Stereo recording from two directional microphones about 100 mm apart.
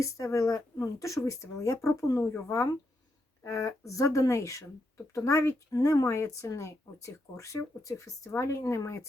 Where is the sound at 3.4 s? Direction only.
35° left (ahead or behind).